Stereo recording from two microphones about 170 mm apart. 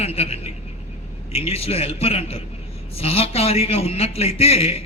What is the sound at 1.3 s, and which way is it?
Speech, 35° left (ahead or behind).